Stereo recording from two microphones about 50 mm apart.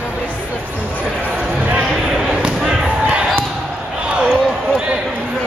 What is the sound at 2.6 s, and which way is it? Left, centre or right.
Slam, centre.